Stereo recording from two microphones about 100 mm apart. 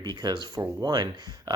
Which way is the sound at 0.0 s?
45° right (ahead or behind).